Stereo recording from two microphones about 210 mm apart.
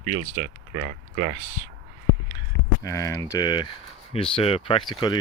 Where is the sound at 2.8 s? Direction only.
15° left (ahead or behind).